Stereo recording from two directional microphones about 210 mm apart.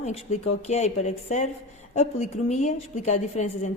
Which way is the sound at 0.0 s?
30° left (ahead or behind).